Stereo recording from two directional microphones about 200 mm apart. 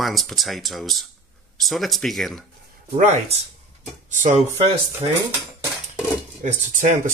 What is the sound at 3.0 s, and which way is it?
Speech, 35° right (ahead or behind).